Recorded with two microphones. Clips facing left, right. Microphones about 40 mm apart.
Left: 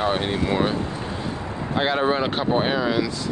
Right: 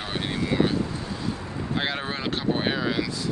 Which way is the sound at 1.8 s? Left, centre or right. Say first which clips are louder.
Left 9 dB; centre.